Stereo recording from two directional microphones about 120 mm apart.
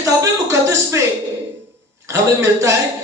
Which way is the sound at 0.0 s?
25° right (ahead or behind).